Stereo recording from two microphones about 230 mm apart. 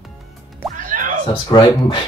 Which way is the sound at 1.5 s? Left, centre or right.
Centre.